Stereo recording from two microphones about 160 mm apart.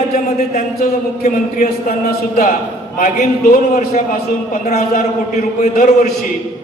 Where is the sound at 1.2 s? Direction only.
50° left (ahead or behind).